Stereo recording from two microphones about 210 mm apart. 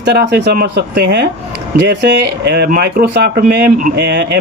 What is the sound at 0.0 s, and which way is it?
Speech, 50° right (ahead or behind).